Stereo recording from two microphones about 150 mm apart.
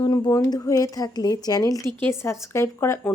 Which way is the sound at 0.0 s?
30° left (ahead or behind).